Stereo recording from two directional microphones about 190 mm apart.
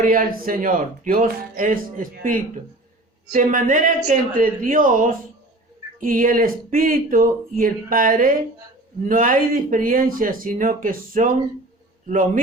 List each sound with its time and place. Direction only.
0.0 s speech: 45° right (ahead or behind)